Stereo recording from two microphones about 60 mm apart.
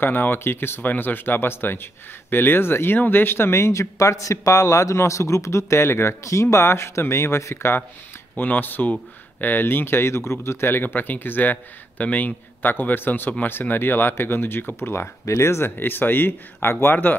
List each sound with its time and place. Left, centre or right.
0.0 s speech: left
8.4 s speech: left